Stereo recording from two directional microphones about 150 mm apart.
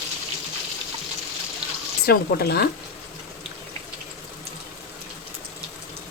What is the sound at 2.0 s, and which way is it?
Speech, 90° left.